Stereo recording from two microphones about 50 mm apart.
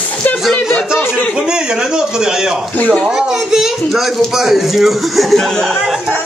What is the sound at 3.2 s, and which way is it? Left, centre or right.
A man's voice, centre.